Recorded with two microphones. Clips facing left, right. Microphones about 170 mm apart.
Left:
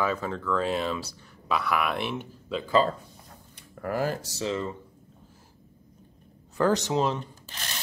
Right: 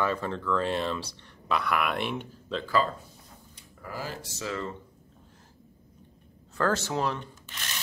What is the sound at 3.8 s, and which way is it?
Speech, 55° left (ahead or behind).